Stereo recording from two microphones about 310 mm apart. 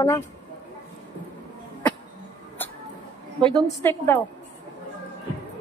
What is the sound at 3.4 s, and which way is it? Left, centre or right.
Speech, centre.